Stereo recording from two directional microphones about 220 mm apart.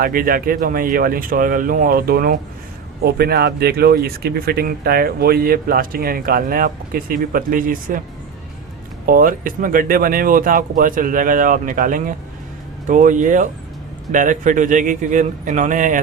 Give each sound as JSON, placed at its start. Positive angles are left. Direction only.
{"t": 0.0, "sound": "speech", "side_deg": -40}
{"t": 9.0, "sound": "speech", "side_deg": -40}